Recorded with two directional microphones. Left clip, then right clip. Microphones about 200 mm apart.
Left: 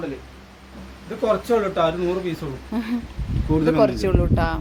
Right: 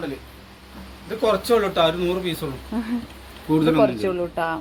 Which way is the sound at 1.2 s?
15° left (ahead or behind).